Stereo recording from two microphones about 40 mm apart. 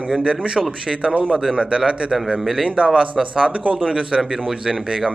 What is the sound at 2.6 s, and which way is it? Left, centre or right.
Speech, right.